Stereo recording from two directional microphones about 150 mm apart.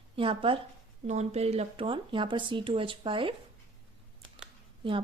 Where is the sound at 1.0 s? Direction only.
45° right (ahead or behind).